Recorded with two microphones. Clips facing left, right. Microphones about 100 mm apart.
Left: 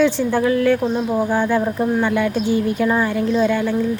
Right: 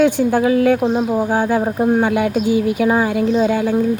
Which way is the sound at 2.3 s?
10° right (ahead or behind).